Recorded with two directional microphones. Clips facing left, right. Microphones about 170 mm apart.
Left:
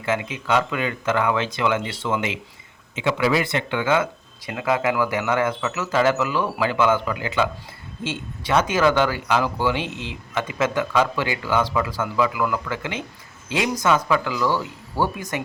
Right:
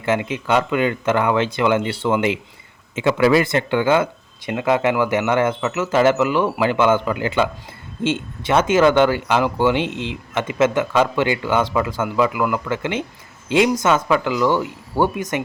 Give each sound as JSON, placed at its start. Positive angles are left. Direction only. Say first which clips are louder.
{"t": 0.0, "sound": "speech", "louder": "right 4 dB", "side_deg": -30}
{"t": 2.9, "sound": "speech", "louder": "right 5 dB", "side_deg": -45}